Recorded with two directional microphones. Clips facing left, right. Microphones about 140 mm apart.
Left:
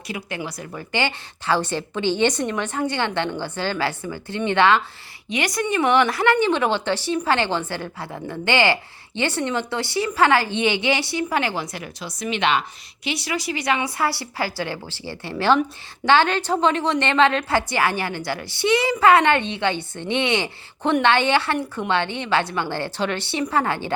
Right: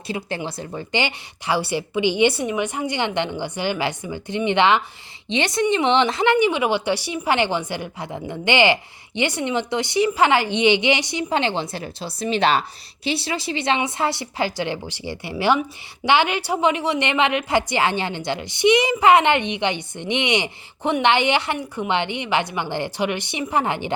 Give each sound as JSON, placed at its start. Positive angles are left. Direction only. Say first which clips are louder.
{"t": 0.1, "sound": "a woman's voice", "louder": "right 3 dB", "side_deg": -30}